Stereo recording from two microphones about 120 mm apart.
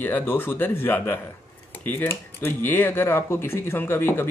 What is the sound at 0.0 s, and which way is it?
Speech, 15° left (ahead or behind).